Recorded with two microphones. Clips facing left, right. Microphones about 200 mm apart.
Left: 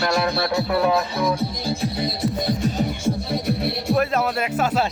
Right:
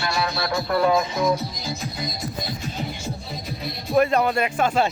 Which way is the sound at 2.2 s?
60° left (ahead or behind).